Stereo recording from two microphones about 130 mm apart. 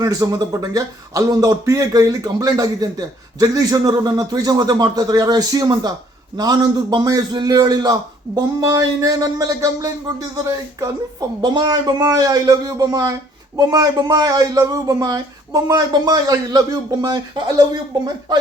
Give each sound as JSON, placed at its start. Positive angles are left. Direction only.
{"t": 0.0, "sound": "speech", "side_deg": -25}